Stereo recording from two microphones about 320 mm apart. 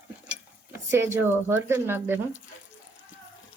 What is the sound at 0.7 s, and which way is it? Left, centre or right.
Speech, centre.